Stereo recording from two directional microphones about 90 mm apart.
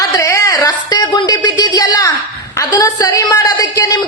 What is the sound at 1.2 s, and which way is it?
A woman's voice, 50° left (ahead or behind).